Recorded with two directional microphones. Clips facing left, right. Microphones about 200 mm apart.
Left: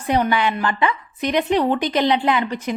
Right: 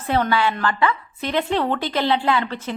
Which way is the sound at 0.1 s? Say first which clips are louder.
Left 1 dB; 15° left (ahead or behind).